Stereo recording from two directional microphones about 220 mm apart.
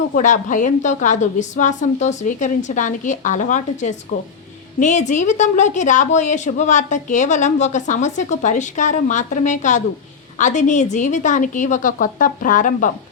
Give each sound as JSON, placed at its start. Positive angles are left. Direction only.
{"t": 0.1, "sound": "a woman's voice", "side_deg": 35}